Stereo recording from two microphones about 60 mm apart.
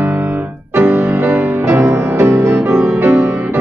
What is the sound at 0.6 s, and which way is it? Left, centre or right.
Music, right.